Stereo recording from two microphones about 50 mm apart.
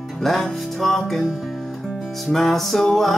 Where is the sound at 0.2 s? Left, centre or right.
Centre.